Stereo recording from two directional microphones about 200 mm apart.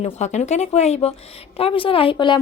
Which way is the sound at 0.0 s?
35° left (ahead or behind).